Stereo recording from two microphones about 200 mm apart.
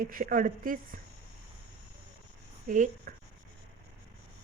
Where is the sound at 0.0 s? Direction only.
45° right (ahead or behind).